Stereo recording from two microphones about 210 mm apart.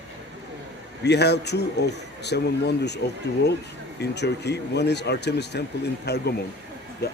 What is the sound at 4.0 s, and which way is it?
Speech, 55° left (ahead or behind).